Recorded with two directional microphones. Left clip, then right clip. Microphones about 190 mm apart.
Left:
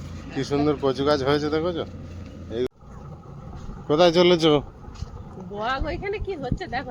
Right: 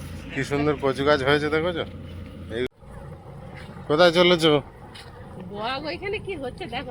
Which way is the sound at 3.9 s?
15° left (ahead or behind).